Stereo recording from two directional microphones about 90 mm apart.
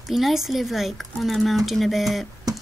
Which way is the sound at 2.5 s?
40° right (ahead or behind).